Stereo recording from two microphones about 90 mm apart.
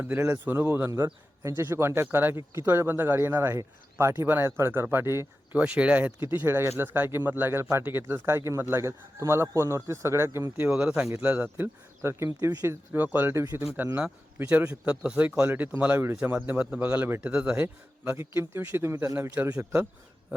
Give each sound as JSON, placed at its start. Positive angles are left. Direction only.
{"t": 0.5, "sound": "a man's voice", "side_deg": -25}
{"t": 1.5, "sound": "speech", "side_deg": -30}
{"t": 5.5, "sound": "speech", "side_deg": -15}
{"t": 10.8, "sound": "a man's voice", "side_deg": -10}
{"t": 12.9, "sound": "a man's voice", "side_deg": -20}
{"t": 18.1, "sound": "speech", "side_deg": -30}